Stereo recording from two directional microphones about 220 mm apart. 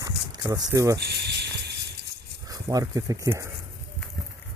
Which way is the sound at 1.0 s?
50° right (ahead or behind).